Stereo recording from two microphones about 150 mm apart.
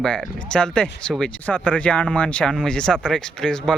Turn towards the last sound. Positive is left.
turn(degrees=5)  # may be behind; listen again after turning